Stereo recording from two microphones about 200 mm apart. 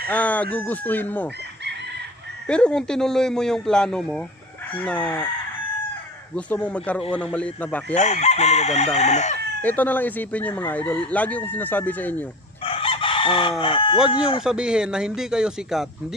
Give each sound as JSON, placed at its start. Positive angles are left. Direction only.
{"t": 0.1, "sound": "speech", "side_deg": 5}
{"t": 2.4, "sound": "speech", "side_deg": 5}
{"t": 6.3, "sound": "speech", "side_deg": 5}
{"t": 7.9, "sound": "chicken", "side_deg": 35}
{"t": 9.6, "sound": "speech", "side_deg": 10}
{"t": 12.6, "sound": "chicken", "side_deg": 25}
{"t": 14.1, "sound": "a man's voice", "side_deg": 25}
{"t": 14.4, "sound": "speech", "side_deg": -5}